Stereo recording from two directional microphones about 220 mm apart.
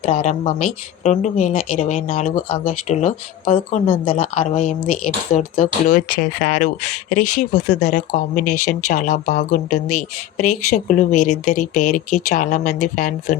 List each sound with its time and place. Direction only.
0.0 s speech: 30° left (ahead or behind)